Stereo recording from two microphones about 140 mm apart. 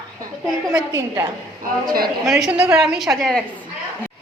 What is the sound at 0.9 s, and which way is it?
Speech, 20° right (ahead or behind).